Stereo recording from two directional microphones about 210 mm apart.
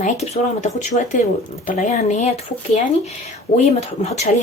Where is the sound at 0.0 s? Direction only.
35° left (ahead or behind).